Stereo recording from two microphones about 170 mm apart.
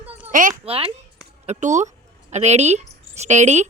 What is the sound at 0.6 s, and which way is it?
Speech, 35° right (ahead or behind).